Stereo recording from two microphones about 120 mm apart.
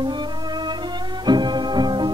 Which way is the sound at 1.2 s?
35° right (ahead or behind).